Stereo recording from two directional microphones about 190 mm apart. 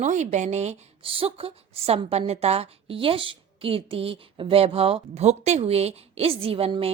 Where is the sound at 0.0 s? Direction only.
40° right (ahead or behind).